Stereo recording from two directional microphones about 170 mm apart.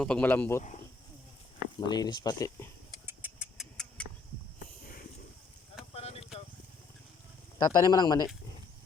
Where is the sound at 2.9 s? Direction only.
10° right (ahead or behind); by 4.1 s 5° left (ahead or behind).